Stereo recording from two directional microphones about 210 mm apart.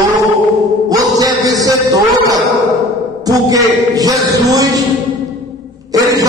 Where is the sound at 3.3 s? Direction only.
15° right (ahead or behind).